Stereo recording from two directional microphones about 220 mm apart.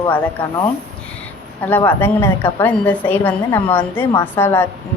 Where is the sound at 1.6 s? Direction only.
10° left (ahead or behind).